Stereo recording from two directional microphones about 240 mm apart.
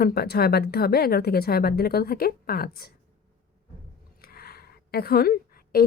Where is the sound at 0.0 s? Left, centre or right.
Left.